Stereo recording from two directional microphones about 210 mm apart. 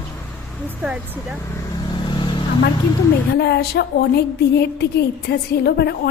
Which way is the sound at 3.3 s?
50° left (ahead or behind).